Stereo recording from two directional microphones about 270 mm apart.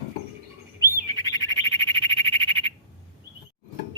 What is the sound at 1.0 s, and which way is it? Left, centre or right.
Bird, centre.